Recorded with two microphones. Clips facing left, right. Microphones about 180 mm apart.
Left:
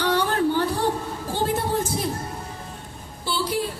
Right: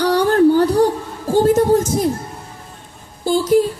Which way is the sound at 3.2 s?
45° right (ahead or behind).